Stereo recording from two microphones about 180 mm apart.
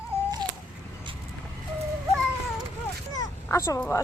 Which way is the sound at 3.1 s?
15° left (ahead or behind).